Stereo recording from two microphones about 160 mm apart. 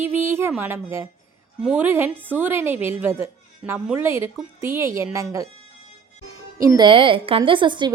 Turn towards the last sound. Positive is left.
turn(degrees=-30)  # may be behind; listen again after turning